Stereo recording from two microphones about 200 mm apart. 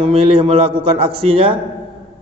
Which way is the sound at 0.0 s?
30° right (ahead or behind).